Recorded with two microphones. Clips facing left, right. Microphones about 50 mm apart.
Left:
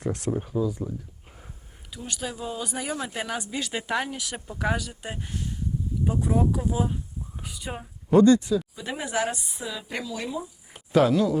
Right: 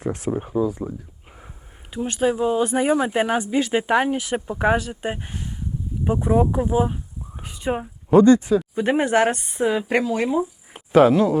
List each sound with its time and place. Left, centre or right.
0.0 s speech: centre
0.3 s speech: right
10.8 s speech: right